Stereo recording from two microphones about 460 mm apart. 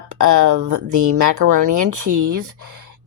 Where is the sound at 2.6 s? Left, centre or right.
Right.